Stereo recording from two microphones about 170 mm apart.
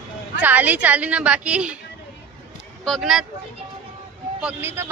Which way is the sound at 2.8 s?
Centre (ahead or behind).